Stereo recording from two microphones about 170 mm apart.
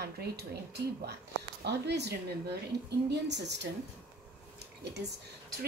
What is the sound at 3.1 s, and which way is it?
Speech, 90° right.